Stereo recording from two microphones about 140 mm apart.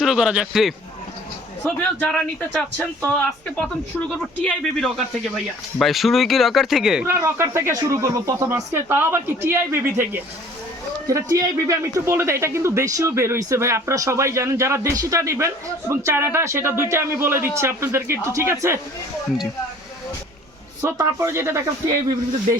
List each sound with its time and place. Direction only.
0.0 s speech: 5° right (ahead or behind)
2.0 s speech: 10° left (ahead or behind)
7.0 s speech: 15° right (ahead or behind)
20.8 s speech: 20° right (ahead or behind)